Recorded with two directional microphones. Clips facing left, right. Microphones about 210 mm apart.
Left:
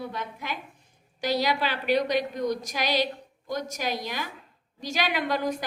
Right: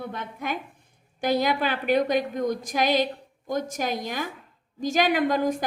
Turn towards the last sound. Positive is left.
turn(degrees=-50)  # may be behind; listen again after turning